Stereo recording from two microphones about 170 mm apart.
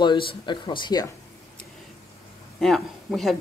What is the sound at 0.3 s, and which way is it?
Speech, 25° left (ahead or behind).